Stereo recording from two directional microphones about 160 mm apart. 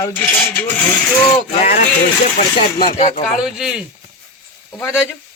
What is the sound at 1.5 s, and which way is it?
Speech, 50° left (ahead or behind).